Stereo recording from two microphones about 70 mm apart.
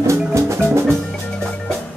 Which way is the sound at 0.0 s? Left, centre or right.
Right.